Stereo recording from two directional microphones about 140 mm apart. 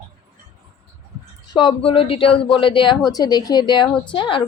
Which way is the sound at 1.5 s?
35° left (ahead or behind).